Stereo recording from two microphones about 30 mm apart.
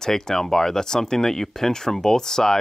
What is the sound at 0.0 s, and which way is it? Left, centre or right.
Speech, centre.